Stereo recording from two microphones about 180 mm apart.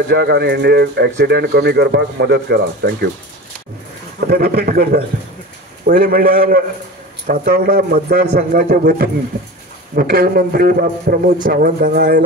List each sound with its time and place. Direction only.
0.1 s speech: 65° right (ahead or behind)
4.3 s a man's voice: 55° right (ahead or behind)